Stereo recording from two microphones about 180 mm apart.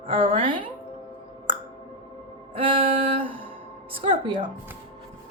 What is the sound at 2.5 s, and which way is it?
A woman's voice, 30° right (ahead or behind).